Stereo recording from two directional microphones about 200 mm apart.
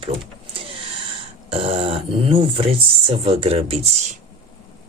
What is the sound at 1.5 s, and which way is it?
Speech, 25° right (ahead or behind).